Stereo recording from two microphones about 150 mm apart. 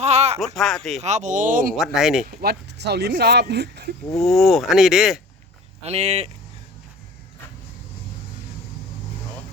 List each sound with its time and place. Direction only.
0.0 s a sound: 45° right (ahead or behind)
0.3 s speech: centre (ahead or behind)
1.0 s speech: 50° right (ahead or behind)
2.0 s speech: 5° right (ahead or behind)
2.4 s speech: 90° right
4.3 s speech: centre (ahead or behind)
5.8 s speech: 45° right (ahead or behind)